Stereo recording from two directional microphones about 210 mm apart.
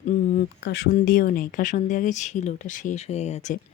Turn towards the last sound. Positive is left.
turn(degrees=35)  # may be behind; listen again after turning